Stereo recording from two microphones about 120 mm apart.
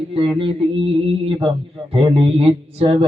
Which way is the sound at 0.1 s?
50° right (ahead or behind).